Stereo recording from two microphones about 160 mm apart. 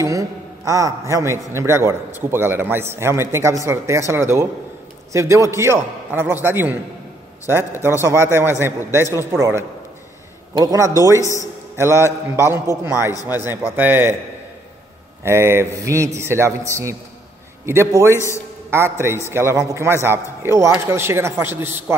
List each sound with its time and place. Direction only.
0.0 s a man's voice: 20° right (ahead or behind)
11.1 s a man's voice: 20° left (ahead or behind)
11.7 s a man's voice: 15° right (ahead or behind)
15.2 s a man's voice: 15° right (ahead or behind)
18.1 s a man's voice: 15° left (ahead or behind)
18.7 s a man's voice: 15° right (ahead or behind)